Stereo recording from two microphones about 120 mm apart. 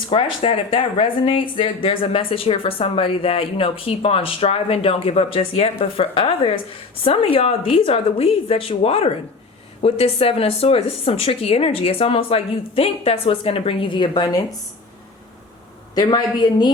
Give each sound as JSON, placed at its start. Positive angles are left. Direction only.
{"t": 0.1, "sound": "speech", "side_deg": 50}
{"t": 16.0, "sound": "a woman's voice", "side_deg": 35}